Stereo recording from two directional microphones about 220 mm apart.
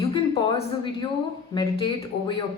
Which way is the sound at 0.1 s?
20° left (ahead or behind).